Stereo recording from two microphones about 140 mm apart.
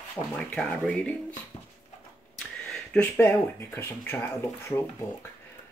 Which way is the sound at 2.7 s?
5° left (ahead or behind).